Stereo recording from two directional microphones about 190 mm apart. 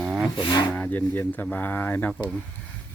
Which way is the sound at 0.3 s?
25° left (ahead or behind).